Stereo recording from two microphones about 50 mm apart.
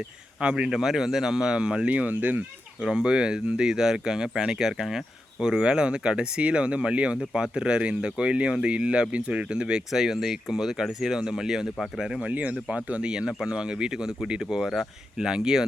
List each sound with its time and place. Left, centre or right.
0.3 s speech: right
1.9 s speech: right
2.8 s speech: centre
9.9 s speech: centre
12.2 s speech: right; by 15.6 s centre